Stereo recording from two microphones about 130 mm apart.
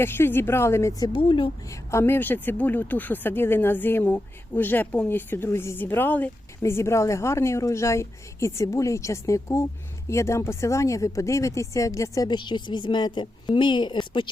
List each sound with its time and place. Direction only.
0.0 s speech: 15° left (ahead or behind); by 1.5 s 35° left (ahead or behind)
1.7 s speech: 20° left (ahead or behind); by 14.0 s 35° left (ahead or behind)